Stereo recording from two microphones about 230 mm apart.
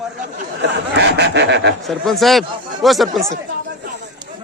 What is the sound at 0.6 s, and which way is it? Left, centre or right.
A man's voice, right.